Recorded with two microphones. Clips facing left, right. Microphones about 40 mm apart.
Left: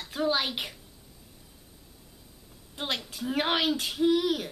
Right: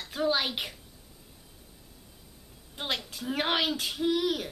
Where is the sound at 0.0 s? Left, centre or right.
Centre.